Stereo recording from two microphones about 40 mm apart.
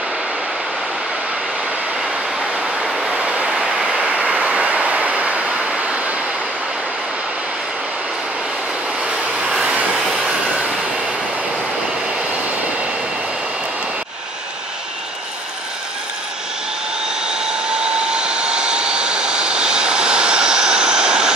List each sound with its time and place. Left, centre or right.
2.8 s vehicle: centre
3.2 s vehicle: right
3.4 s vehicle: centre
4.1 s vehicle: right
9.0 s vehicle: right
17.3 s vehicle: right